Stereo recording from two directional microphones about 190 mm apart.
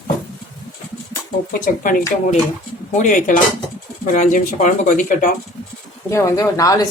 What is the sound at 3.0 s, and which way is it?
Speech, 40° left (ahead or behind).